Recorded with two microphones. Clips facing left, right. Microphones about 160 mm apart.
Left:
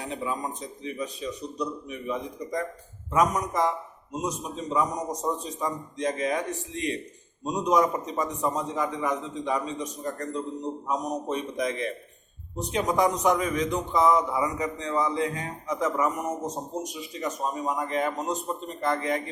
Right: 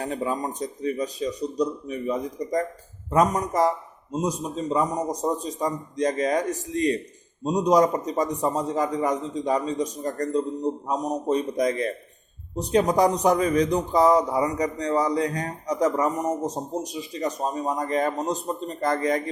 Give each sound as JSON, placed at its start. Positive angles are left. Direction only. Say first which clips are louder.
{"t": 0.0, "sound": "a man's voice", "louder": "right 4 dB", "side_deg": -40}